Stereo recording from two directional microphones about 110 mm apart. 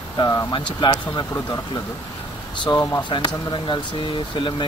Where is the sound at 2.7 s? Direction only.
40° left (ahead or behind).